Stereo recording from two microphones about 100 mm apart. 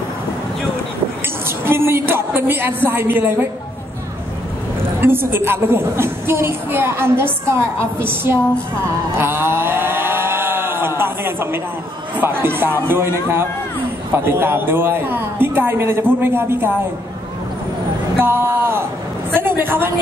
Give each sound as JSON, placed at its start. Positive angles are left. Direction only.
{"t": 1.6, "sound": "a woman's voice", "side_deg": -25}
{"t": 5.0, "sound": "a woman's voice", "side_deg": -25}
{"t": 9.2, "sound": "a sound", "side_deg": -25}
{"t": 12.2, "sound": "a woman's voice", "side_deg": -20}
{"t": 18.2, "sound": "a woman's voice", "side_deg": -20}